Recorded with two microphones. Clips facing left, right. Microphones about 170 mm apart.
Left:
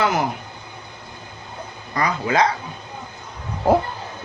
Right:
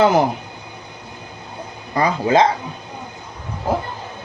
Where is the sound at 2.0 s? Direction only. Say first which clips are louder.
Right 4 dB; 30° right (ahead or behind).